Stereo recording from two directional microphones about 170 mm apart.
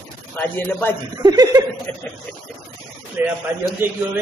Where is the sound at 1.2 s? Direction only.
25° right (ahead or behind).